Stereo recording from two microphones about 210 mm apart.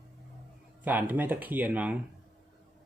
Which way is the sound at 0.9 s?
10° right (ahead or behind).